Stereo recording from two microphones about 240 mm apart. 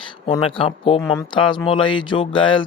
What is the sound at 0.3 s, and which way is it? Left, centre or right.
Speech, left.